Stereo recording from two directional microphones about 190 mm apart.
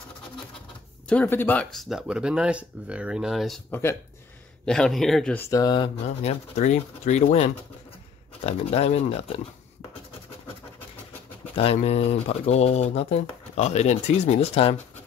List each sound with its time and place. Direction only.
1.0 s speech: 10° left (ahead or behind)
5.5 s mantra: 20° left (ahead or behind)
6.0 s speech: 35° left (ahead or behind)
11.5 s speech: 30° left (ahead or behind)